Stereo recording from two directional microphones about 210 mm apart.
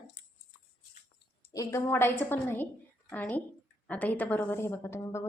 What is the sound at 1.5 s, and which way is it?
A woman's voice, 15° left (ahead or behind).